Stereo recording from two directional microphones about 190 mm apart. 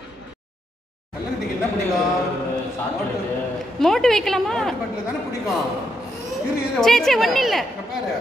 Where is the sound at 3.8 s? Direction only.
Centre (ahead or behind).